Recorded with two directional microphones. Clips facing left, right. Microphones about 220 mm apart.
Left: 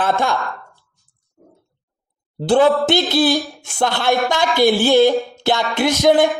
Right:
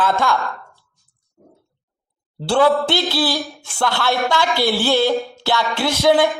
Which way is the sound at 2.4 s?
20° left (ahead or behind).